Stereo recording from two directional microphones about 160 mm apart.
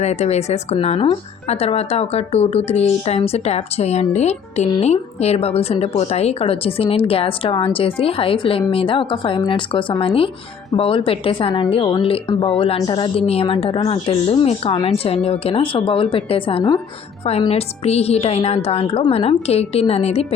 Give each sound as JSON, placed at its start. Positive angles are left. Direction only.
{"t": 0.0, "sound": "a woman's voice", "side_deg": 45}